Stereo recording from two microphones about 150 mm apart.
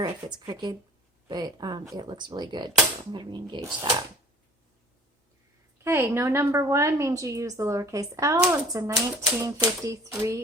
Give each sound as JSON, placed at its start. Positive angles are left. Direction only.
{"t": 0.0, "sound": "a woman's voice", "side_deg": -30}
{"t": 5.8, "sound": "a woman's voice", "side_deg": -20}